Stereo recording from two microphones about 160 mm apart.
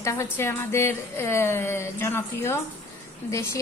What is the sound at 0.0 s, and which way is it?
A woman's voice, 20° left (ahead or behind).